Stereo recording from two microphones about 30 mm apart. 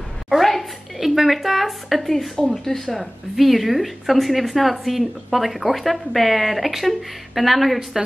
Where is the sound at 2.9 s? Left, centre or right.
Centre.